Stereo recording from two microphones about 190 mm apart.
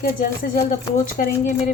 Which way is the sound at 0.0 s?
50° left (ahead or behind).